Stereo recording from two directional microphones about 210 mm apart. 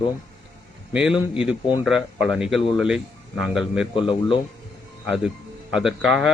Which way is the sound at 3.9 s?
25° left (ahead or behind).